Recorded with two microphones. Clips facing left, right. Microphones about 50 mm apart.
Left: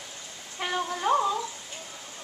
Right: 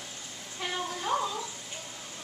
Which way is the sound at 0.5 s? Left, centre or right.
Left.